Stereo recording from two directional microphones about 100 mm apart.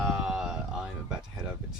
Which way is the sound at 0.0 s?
10° right (ahead or behind).